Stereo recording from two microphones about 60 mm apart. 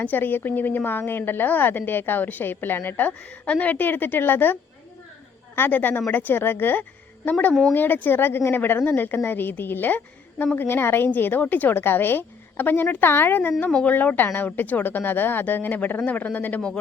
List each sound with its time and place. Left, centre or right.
0.0 s a woman's voice: left
5.5 s a woman's voice: left